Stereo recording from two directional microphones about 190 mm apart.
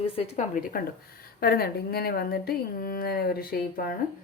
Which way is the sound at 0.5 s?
50° left (ahead or behind).